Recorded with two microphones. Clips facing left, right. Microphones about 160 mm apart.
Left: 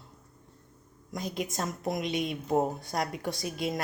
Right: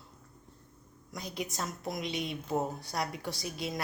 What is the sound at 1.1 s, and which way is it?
Speech, 20° left (ahead or behind).